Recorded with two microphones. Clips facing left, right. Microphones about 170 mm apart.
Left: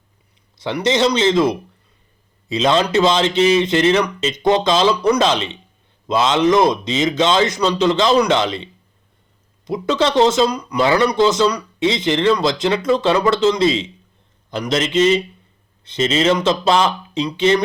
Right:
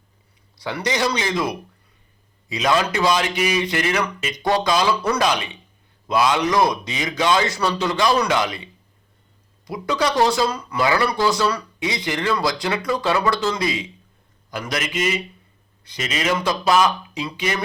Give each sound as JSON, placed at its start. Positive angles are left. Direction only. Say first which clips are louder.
{"t": 0.5, "sound": "speech", "louder": "left 6 dB", "side_deg": 20}